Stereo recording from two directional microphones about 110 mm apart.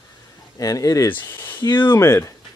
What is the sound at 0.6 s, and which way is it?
Speech, 30° left (ahead or behind).